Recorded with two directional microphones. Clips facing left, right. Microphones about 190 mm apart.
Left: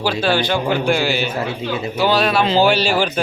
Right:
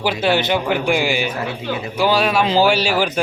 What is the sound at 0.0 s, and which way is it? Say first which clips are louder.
A man's voice: even; 20° right (ahead or behind).